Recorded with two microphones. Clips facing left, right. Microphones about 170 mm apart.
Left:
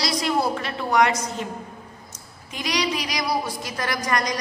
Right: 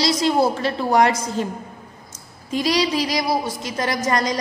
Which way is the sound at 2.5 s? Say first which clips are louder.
Right 6 dB; 30° right (ahead or behind).